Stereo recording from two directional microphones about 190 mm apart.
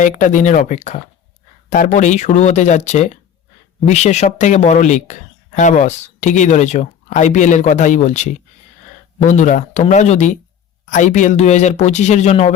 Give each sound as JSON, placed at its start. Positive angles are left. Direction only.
{"t": 0.0, "sound": "speech", "side_deg": 40}